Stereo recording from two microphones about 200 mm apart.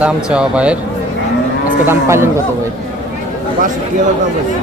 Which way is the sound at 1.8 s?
10° right (ahead or behind).